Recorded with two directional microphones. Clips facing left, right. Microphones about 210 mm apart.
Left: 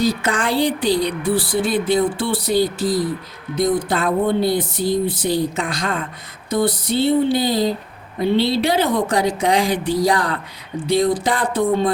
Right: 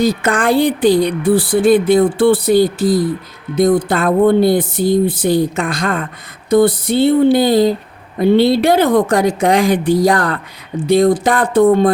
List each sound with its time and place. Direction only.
0.0 s speech: 50° right (ahead or behind)
6.5 s a sound: 55° right (ahead or behind)
8.2 s speech: 55° right (ahead or behind)